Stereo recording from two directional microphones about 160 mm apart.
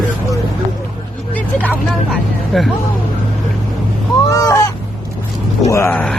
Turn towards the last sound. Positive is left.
turn(degrees=15)  # may be behind; listen again after turning